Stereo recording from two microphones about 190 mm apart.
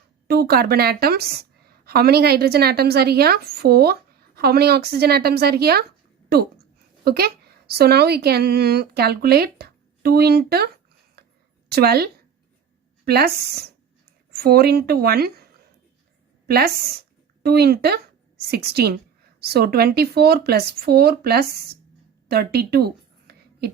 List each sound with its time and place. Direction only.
0.3 s a woman's voice: 55° right (ahead or behind)
6.2 s a sound: 55° right (ahead or behind)
7.8 s a woman's voice: 55° right (ahead or behind)
11.7 s a woman's voice: 55° right (ahead or behind)
16.5 s a woman's voice: 55° right (ahead or behind)
22.3 s a sound: 55° right (ahead or behind)